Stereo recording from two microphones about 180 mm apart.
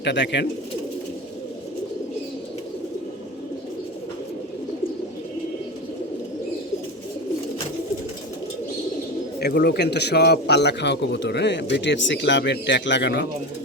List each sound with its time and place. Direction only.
0.0 s a man's voice: 75° left (ahead or behind)
9.4 s a man's voice: 60° left (ahead or behind)